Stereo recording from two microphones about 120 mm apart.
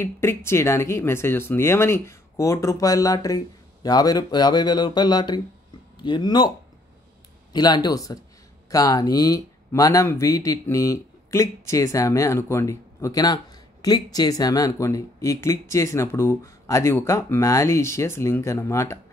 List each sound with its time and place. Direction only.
0.0 s speech: 20° left (ahead or behind); by 6.5 s 35° left (ahead or behind)
7.5 s speech: 35° left (ahead or behind)